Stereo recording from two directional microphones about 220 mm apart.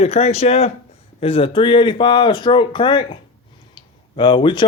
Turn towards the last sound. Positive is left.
turn(degrees=20)  # may be behind; listen again after turning